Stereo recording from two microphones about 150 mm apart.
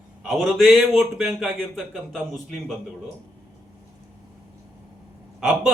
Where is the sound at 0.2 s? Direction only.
5° right (ahead or behind).